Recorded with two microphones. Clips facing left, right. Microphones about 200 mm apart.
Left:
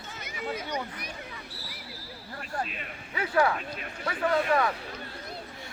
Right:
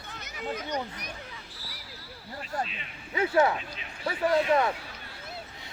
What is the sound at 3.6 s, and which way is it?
Speech, 50° left (ahead or behind).